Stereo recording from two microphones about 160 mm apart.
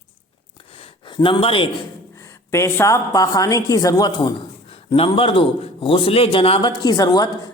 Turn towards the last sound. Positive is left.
turn(degrees=25)  # may be behind; listen again after turning